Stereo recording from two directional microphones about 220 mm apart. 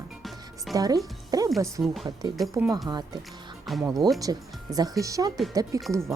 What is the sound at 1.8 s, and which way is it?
Speech, centre (ahead or behind).